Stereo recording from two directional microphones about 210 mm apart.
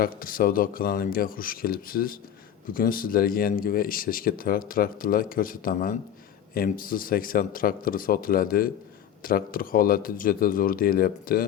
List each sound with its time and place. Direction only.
0.0 s speech: 40° left (ahead or behind)